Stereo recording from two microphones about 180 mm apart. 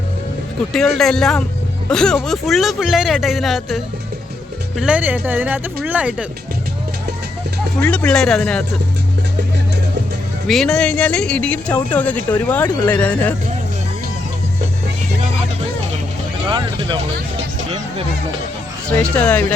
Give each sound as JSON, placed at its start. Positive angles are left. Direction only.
{"t": 0.9, "sound": "speech", "side_deg": 5}
{"t": 4.8, "sound": "speech", "side_deg": -5}
{"t": 7.8, "sound": "speech", "side_deg": 5}
{"t": 10.4, "sound": "speech", "side_deg": 0}
{"t": 16.5, "sound": "vehicle", "side_deg": -25}
{"t": 19.1, "sound": "speech", "side_deg": 10}